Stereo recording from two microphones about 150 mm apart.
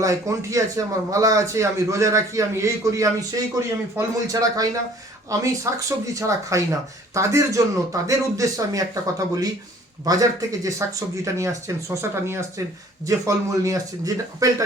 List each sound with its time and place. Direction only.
0.0 s a man's voice: 20° right (ahead or behind)